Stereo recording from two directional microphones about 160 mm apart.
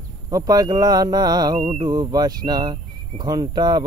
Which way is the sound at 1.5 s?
35° right (ahead or behind).